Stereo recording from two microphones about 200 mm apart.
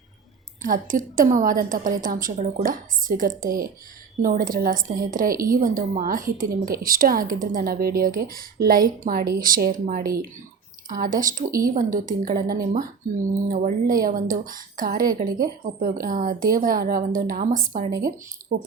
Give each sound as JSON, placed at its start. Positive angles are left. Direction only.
{"t": 0.6, "sound": "a woman's voice", "side_deg": -45}